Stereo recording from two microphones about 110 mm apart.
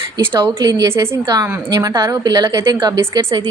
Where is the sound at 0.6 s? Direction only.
35° right (ahead or behind).